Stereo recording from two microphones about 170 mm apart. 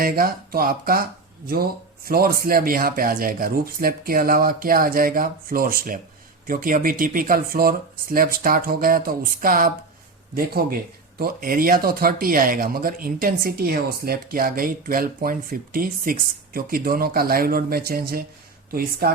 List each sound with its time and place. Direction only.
0.0 s speech: 60° right (ahead or behind)
2.0 s speech: 60° right (ahead or behind)